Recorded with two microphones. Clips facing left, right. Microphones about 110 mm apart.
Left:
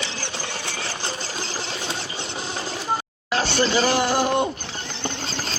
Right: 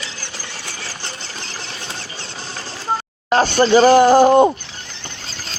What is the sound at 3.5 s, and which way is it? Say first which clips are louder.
Speech: right 10 dB; 45° right (ahead or behind).